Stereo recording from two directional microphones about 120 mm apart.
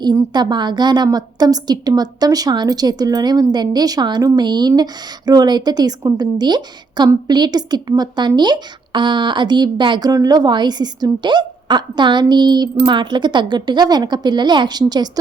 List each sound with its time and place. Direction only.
0.0 s speech: 35° right (ahead or behind)